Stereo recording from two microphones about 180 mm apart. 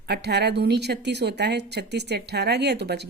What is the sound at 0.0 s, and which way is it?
A woman's voice, 65° right (ahead or behind).